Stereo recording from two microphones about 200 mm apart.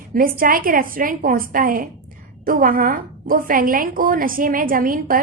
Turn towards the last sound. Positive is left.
turn(degrees=-45)  # may be behind; listen again after turning